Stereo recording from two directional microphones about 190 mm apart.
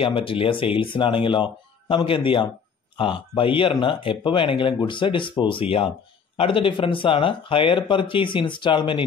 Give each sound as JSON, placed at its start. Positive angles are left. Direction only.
{"t": 0.0, "sound": "speech", "side_deg": 30}